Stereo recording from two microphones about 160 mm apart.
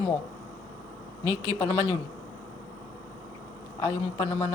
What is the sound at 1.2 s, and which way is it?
Speech, 20° right (ahead or behind).